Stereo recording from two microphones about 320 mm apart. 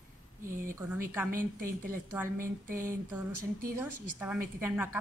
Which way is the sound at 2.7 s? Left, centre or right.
Right.